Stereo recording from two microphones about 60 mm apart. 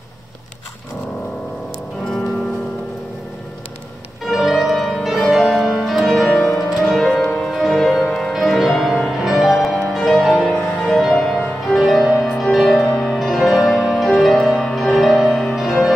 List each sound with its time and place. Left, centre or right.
4.3 s music: centre
7.5 s music: centre